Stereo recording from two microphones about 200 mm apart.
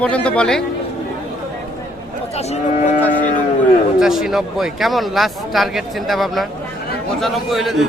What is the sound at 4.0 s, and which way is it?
A man's voice, centre (ahead or behind).